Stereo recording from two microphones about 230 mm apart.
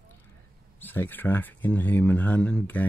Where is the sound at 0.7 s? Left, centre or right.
Centre.